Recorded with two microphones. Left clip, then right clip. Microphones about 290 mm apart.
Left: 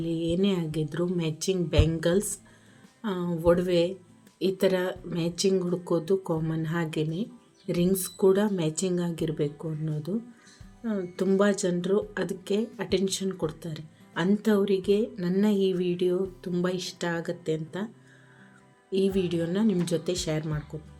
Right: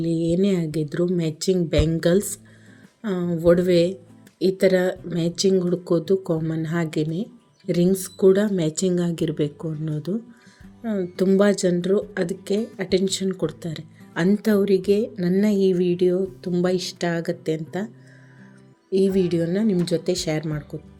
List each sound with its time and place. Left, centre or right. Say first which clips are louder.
0.0 s speech: right 6 dB; centre
18.9 s speech: right 6 dB; centre